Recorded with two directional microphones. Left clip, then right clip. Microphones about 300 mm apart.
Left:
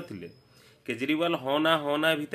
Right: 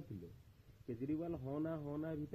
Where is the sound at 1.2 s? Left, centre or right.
Left.